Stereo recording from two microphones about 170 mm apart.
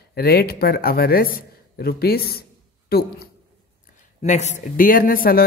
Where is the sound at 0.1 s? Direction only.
65° left (ahead or behind).